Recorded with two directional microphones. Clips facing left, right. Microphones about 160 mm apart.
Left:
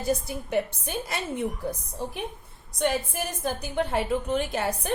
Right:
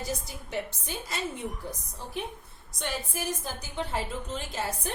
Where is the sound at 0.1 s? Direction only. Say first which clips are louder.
Left 13 dB; 60° left (ahead or behind).